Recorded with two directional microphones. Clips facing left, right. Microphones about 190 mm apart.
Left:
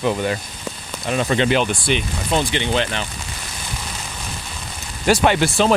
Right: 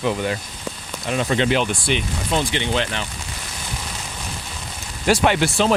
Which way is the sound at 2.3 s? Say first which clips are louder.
Left 2 dB; 25° left (ahead or behind).